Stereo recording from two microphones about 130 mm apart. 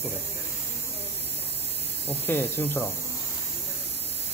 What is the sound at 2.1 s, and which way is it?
Speech, 15° left (ahead or behind).